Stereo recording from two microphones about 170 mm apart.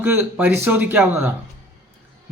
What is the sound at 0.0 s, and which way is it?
Speech, 15° right (ahead or behind).